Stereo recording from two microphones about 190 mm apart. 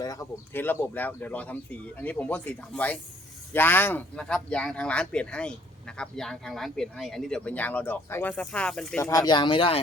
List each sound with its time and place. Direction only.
0.0 s speech: 20° left (ahead or behind)
9.0 s speech: 15° left (ahead or behind)